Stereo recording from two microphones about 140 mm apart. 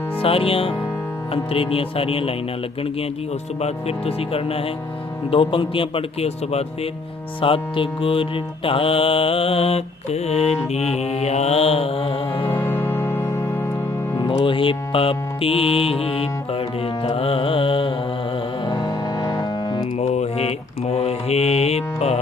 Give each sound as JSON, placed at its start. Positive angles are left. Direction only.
{"t": 0.2, "sound": "speech", "side_deg": 40}
{"t": 3.6, "sound": "mantra", "side_deg": 45}
{"t": 5.3, "sound": "speech", "side_deg": 40}
{"t": 7.4, "sound": "mantra", "side_deg": 40}
{"t": 12.5, "sound": "music", "side_deg": 15}
{"t": 14.2, "sound": "music", "side_deg": 35}
{"t": 18.6, "sound": "music", "side_deg": 30}
{"t": 20.0, "sound": "mantra", "side_deg": 50}